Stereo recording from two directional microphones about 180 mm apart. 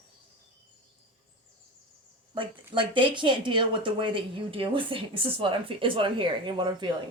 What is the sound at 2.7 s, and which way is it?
Speech, 25° right (ahead or behind).